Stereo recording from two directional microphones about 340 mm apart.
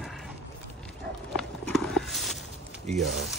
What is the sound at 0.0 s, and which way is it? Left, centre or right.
Horse, centre.